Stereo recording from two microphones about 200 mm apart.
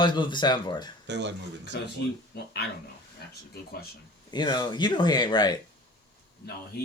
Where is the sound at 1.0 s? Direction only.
60° right (ahead or behind).